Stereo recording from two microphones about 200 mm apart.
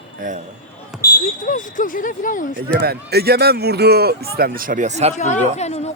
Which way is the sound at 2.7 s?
50° right (ahead or behind).